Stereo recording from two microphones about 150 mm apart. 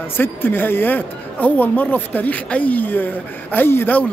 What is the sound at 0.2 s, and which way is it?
Speech, 15° left (ahead or behind).